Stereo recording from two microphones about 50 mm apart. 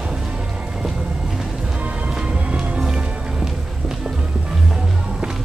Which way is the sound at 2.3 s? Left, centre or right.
Right.